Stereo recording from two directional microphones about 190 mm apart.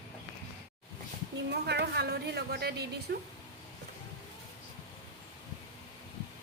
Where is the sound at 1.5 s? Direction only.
60° right (ahead or behind).